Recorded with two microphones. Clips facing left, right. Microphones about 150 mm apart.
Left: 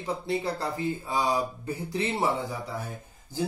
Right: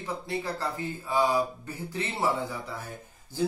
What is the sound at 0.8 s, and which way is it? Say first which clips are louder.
A man's voice: right 2 dB; 15° left (ahead or behind).